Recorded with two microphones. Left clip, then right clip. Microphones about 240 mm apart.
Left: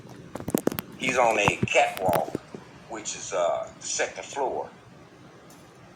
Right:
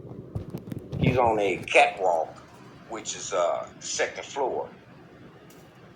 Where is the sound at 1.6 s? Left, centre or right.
Right.